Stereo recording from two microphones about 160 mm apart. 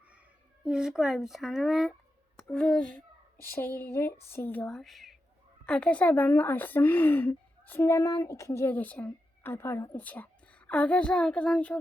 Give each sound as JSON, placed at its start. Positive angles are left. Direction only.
{"t": 0.6, "sound": "a woman's voice", "side_deg": -5}